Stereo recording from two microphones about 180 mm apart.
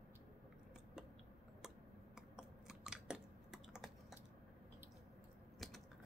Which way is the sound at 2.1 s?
5° right (ahead or behind).